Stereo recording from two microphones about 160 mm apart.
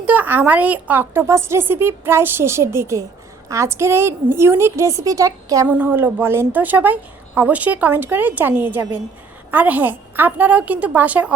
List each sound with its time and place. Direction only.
0.0 s a woman's voice: 10° right (ahead or behind)
5.6 s a woman's voice: 10° right (ahead or behind)